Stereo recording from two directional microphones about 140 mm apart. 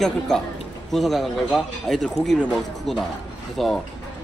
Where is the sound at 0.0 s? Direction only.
5° left (ahead or behind).